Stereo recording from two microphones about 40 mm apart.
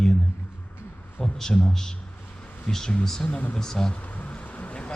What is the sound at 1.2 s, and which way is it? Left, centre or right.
A man's voice, centre.